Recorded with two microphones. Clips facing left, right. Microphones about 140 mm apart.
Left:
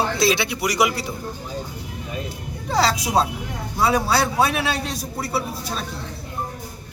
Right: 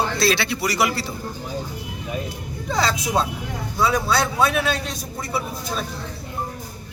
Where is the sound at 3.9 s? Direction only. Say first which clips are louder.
Left 3 dB; 10° left (ahead or behind).